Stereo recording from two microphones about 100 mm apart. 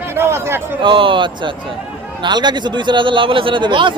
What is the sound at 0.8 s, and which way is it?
A man's voice, 55° right (ahead or behind).